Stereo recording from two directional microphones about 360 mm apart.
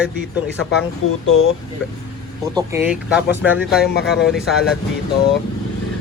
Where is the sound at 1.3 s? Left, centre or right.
Left.